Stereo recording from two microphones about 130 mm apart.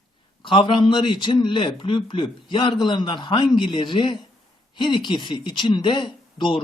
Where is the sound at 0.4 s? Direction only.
40° left (ahead or behind).